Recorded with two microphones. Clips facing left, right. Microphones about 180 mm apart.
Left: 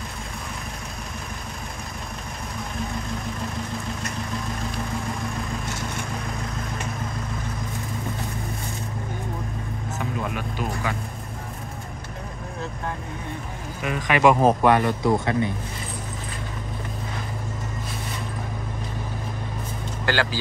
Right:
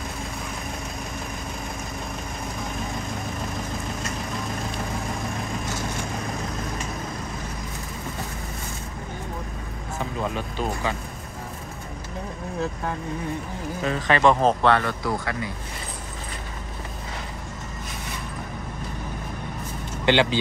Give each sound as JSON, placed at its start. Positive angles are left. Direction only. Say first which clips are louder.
{"t": 13.8, "sound": "speech", "louder": "left 1 dB", "side_deg": 10}
{"t": 20.1, "sound": "speech", "louder": "right 5 dB", "side_deg": -20}